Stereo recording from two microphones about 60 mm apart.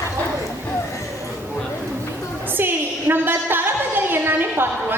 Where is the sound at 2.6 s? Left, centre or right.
Right.